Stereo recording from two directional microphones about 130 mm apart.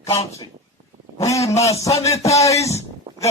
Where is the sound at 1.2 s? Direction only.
25° left (ahead or behind).